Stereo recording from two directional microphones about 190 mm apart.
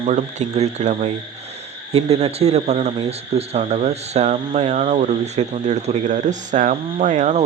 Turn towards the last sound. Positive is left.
turn(degrees=-40)  # may be behind; listen again after turning